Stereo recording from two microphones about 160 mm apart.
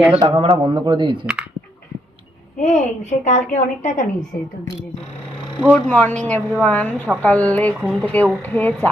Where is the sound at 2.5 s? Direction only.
45° left (ahead or behind).